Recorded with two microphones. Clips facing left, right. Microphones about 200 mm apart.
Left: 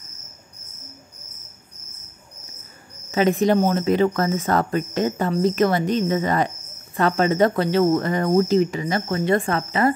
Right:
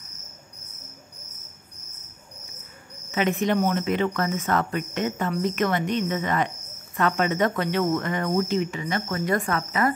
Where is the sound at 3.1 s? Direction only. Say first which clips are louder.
Left 5 dB; 35° left (ahead or behind).